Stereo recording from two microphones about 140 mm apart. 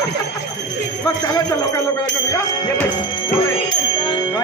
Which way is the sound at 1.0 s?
25° left (ahead or behind).